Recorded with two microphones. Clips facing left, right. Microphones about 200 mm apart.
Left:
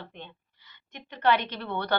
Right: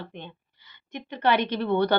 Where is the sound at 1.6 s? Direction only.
15° right (ahead or behind).